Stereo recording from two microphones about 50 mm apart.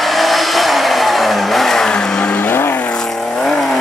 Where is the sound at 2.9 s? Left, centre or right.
Centre.